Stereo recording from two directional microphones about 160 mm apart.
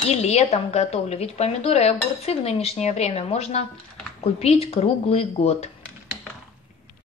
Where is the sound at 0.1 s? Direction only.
40° left (ahead or behind).